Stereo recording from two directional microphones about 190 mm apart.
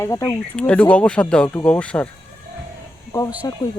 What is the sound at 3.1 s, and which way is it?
Speech, 15° left (ahead or behind).